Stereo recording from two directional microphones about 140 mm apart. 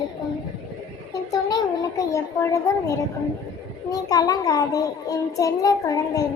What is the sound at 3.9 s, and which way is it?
A child's voice, 25° left (ahead or behind).